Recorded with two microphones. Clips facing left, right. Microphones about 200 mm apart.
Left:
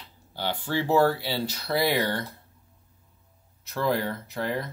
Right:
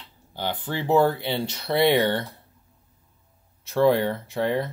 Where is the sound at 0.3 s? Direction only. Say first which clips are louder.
Even; 15° right (ahead or behind).